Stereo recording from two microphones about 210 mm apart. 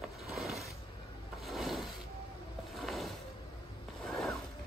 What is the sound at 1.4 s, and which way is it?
Rub, centre (ahead or behind).